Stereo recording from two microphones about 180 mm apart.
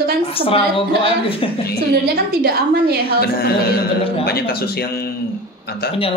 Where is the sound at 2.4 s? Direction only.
60° right (ahead or behind).